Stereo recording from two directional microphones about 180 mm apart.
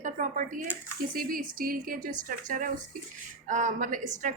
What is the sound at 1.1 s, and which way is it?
A woman's voice, 50° right (ahead or behind).